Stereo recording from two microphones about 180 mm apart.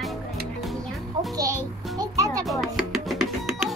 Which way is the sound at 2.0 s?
20° right (ahead or behind).